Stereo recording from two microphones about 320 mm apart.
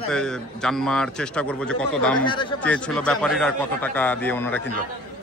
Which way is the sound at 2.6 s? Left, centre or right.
Centre.